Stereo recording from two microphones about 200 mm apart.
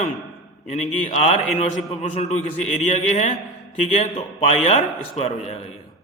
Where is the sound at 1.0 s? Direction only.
35° left (ahead or behind).